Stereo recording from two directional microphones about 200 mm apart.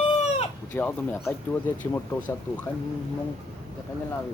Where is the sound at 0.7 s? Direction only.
10° left (ahead or behind).